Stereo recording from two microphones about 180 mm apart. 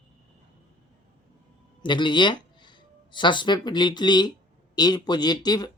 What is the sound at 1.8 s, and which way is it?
Speech, 25° left (ahead or behind).